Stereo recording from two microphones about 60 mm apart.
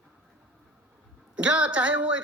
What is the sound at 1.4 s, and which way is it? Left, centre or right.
Speech, centre.